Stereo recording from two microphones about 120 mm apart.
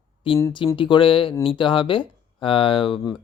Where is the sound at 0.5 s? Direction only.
45° left (ahead or behind).